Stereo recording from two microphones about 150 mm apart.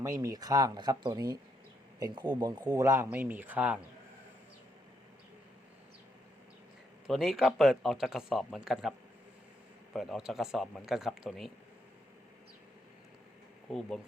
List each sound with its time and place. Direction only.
0.0 s speech: 20° right (ahead or behind)
2.4 s speech: 25° right (ahead or behind); by 3.8 s 10° right (ahead or behind)
7.1 s speech: centre (ahead or behind)